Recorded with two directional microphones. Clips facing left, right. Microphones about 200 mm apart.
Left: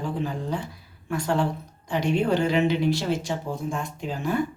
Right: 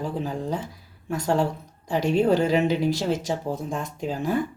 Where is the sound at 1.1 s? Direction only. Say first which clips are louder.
Right 1 dB; 40° right (ahead or behind).